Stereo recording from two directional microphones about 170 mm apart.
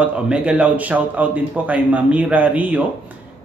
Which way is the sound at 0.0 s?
5° right (ahead or behind).